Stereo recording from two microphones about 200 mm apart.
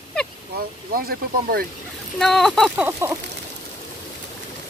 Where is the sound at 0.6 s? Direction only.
45° right (ahead or behind).